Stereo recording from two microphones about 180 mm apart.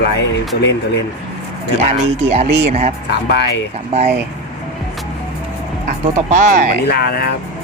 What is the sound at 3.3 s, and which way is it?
Speech, 70° left (ahead or behind).